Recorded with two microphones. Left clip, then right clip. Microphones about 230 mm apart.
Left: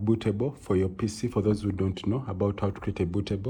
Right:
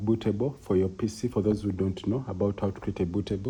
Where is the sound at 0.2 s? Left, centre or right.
Left.